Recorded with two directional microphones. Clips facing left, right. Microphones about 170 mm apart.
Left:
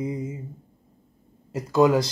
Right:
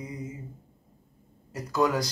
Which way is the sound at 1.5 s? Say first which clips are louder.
Left 7 dB; 25° left (ahead or behind).